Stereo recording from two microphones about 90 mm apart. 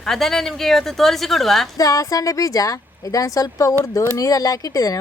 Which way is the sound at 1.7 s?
40° left (ahead or behind).